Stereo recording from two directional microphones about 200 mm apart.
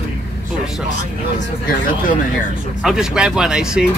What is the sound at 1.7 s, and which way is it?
Speech, 45° left (ahead or behind).